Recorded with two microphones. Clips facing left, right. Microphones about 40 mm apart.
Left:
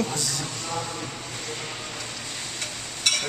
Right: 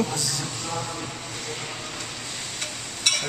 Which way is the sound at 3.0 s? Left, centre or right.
Centre.